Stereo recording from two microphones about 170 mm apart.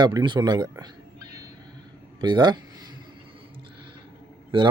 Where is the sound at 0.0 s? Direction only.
25° right (ahead or behind).